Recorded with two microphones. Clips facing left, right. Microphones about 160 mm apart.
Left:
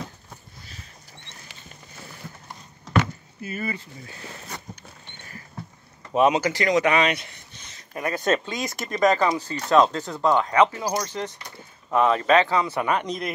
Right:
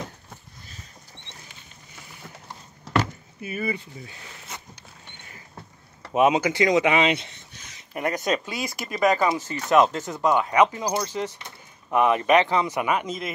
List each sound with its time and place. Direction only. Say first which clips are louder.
3.3 s speech: right 2 dB; 15° right (ahead or behind)
6.1 s speech: even; 15° right (ahead or behind)